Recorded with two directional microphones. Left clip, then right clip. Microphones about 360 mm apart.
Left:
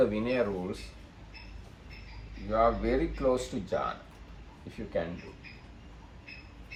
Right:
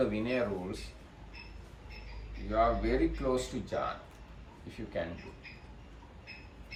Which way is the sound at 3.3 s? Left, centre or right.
Centre.